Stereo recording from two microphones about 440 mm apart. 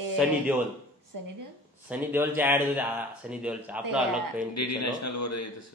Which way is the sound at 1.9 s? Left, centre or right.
Centre.